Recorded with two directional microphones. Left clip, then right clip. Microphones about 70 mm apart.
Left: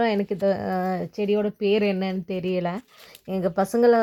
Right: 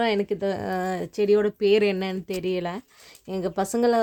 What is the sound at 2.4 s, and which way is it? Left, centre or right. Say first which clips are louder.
Speech: left 2 dB; centre.